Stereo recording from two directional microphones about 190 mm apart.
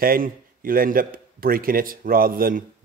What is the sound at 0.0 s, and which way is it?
Speech, 50° right (ahead or behind).